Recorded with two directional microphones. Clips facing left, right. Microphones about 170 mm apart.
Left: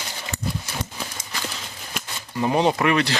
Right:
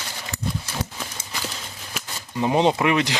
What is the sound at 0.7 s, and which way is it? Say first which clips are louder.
Clip-clop: right 1 dB; 5° left (ahead or behind).